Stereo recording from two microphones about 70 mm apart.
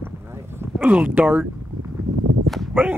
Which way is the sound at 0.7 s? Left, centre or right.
Right.